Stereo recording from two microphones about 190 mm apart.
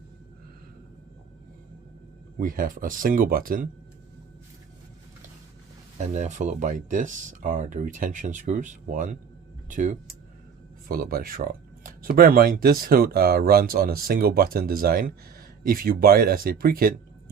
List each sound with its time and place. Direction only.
2.4 s speech: 45° right (ahead or behind)
6.0 s speech: 40° right (ahead or behind)